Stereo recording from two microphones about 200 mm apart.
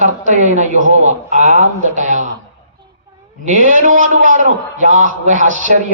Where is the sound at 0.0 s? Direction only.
40° right (ahead or behind).